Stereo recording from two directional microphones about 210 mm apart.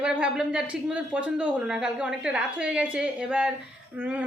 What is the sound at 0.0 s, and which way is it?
Speech, 5° right (ahead or behind).